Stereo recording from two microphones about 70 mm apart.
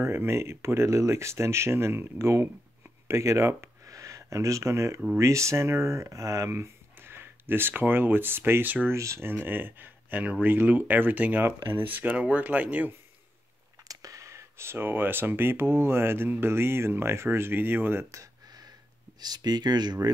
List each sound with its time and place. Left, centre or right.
0.0 s speech: right
8.9 s speech: right
9.3 s speech: right
13.8 s speech: right
19.1 s speech: right